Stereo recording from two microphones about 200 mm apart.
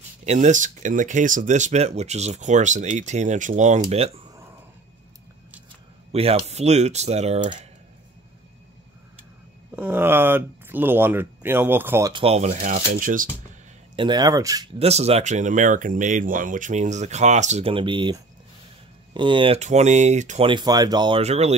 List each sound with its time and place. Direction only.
0.2 s speech: 35° right (ahead or behind)
6.1 s speech: 30° right (ahead or behind)
9.8 s speech: 10° right (ahead or behind)
12.1 s speech: 30° right (ahead or behind)
13.9 s speech: 20° right (ahead or behind)
14.8 s speech: 30° right (ahead or behind)